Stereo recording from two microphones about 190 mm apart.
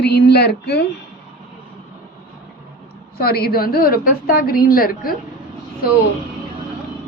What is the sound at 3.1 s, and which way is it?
A woman's voice, 55° left (ahead or behind).